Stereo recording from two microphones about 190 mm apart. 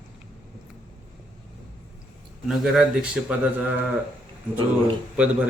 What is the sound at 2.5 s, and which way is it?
Speech, centre (ahead or behind).